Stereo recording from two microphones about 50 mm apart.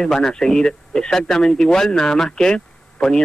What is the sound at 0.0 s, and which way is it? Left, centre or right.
Speech, centre.